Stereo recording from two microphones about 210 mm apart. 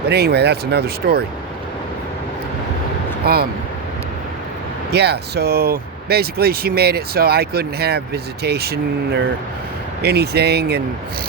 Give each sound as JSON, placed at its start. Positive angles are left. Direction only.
{"t": 0.1, "sound": "speech", "side_deg": -50}
{"t": 3.2, "sound": "speech", "side_deg": -45}
{"t": 4.9, "sound": "speech", "side_deg": -50}